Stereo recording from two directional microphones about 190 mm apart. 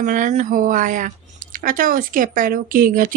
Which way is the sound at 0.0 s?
40° right (ahead or behind).